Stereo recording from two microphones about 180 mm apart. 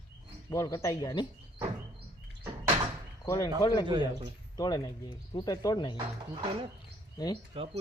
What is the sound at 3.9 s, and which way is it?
Speech, 25° right (ahead or behind).